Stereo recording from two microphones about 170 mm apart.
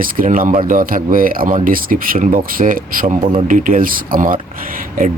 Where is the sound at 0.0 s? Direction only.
55° right (ahead or behind).